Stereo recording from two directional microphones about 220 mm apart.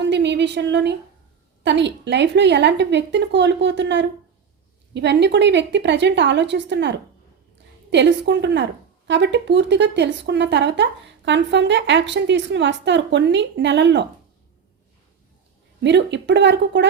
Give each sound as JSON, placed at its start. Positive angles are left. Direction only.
{"t": 0.0, "sound": "speech", "side_deg": -50}
{"t": 15.8, "sound": "speech", "side_deg": -55}